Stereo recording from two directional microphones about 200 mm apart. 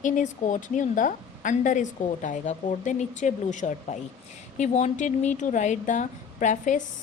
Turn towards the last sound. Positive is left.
turn(degrees=40)  # may be behind; listen again after turning